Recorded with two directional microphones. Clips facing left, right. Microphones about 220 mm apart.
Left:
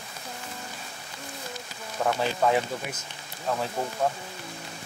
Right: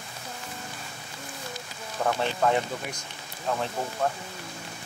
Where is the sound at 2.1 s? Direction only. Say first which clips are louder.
Left 1 dB; 5° left (ahead or behind).